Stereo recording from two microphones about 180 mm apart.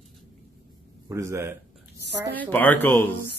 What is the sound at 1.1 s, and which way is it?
Speech, 15° right (ahead or behind).